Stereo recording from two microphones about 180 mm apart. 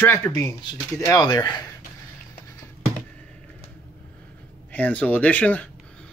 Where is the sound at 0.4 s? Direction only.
15° left (ahead or behind).